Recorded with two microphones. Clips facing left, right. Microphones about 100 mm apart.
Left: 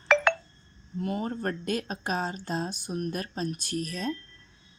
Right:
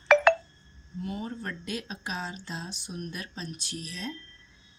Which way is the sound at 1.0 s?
50° left (ahead or behind).